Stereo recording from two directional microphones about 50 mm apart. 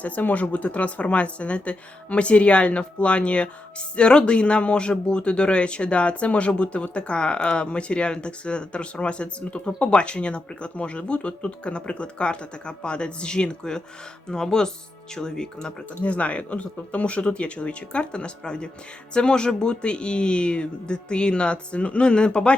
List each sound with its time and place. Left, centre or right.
0.0 s speech: left; by 15.7 s centre
16.0 s speech: left